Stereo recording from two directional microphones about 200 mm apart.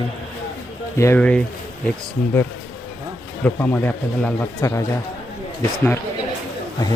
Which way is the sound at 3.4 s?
10° left (ahead or behind).